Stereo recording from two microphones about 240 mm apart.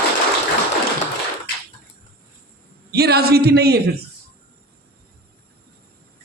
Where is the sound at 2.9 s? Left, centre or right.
Right.